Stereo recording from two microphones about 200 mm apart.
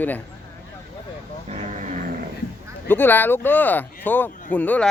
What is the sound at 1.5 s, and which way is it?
Vehicle, 35° right (ahead or behind).